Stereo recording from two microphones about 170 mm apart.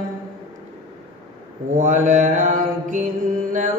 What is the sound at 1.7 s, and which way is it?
Mantra, 50° right (ahead or behind).